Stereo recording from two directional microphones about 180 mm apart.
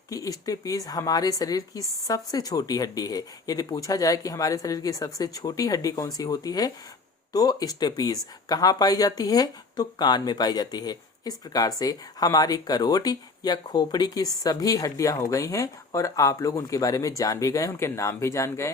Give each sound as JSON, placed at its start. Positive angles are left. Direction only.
{"t": 0.1, "sound": "speech", "side_deg": 20}